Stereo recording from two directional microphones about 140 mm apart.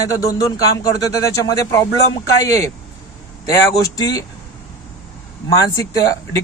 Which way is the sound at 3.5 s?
25° left (ahead or behind).